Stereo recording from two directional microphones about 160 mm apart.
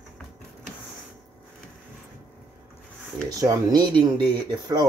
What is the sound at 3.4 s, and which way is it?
Speech, 25° right (ahead or behind).